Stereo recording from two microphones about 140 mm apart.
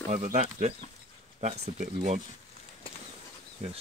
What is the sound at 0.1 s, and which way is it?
Speech, 60° right (ahead or behind).